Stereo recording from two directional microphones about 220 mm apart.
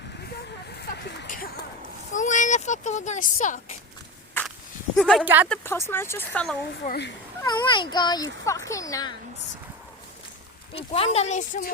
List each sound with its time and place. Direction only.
0.8 s a sound: 50° left (ahead or behind)
2.1 s a sound: 35° left (ahead or behind)
4.9 s speech: centre (ahead or behind)
5.5 s speech: 10° left (ahead or behind)
6.8 s speech: 45° left (ahead or behind)
7.4 s speech: 20° left (ahead or behind)
10.8 s speech: 25° left (ahead or behind)